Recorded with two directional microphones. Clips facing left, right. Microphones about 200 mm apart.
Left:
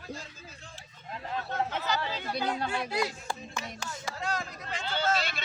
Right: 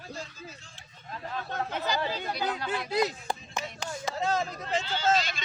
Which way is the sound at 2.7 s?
20° right (ahead or behind).